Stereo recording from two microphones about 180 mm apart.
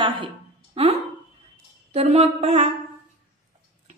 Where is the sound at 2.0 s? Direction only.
35° right (ahead or behind).